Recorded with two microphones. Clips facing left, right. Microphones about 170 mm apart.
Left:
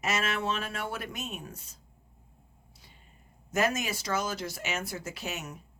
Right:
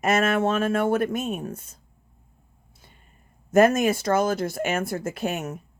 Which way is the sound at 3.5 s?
55° right (ahead or behind).